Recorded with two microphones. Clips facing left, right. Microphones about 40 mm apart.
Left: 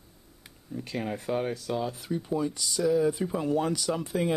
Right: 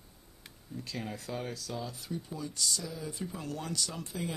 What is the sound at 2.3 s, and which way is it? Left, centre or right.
Speech, left.